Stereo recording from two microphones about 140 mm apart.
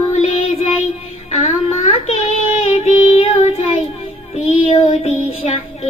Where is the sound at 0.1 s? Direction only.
50° left (ahead or behind).